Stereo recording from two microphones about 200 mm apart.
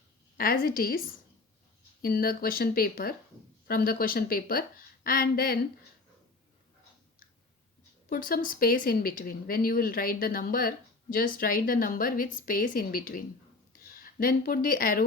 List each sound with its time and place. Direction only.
0.3 s speech: 45° left (ahead or behind)
8.1 s speech: 45° left (ahead or behind)